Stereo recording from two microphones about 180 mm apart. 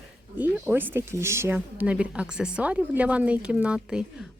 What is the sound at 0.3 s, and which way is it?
Speech, 10° right (ahead or behind).